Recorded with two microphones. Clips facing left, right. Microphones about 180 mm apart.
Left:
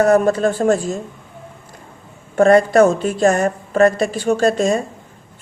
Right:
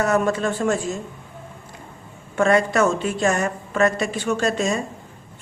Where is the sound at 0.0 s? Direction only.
35° left (ahead or behind).